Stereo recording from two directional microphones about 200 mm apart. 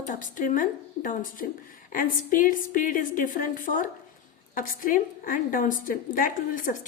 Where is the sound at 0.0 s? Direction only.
40° left (ahead or behind).